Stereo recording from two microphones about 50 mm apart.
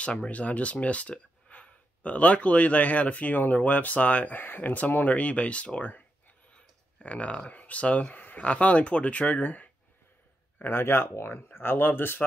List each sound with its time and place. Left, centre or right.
0.0 s speech: left
6.5 s a sound: left
8.5 s speech: left
10.6 s speech: left